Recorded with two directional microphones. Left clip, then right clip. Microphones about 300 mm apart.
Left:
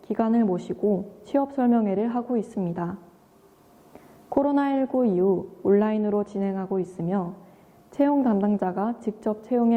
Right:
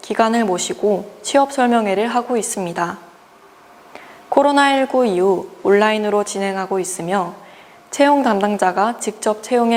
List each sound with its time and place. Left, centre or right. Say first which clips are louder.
0.0 s speech: right 9 dB; centre
0.8 s a woman's voice: right 7 dB; right
1.2 s a woman's voice: right 11 dB; centre